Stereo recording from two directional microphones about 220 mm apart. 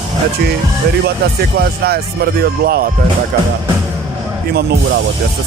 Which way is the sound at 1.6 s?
45° right (ahead or behind).